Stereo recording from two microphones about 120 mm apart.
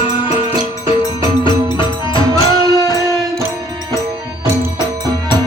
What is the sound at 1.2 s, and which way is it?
Music, 40° left (ahead or behind).